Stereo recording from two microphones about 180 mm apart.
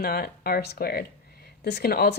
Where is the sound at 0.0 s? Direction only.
55° left (ahead or behind).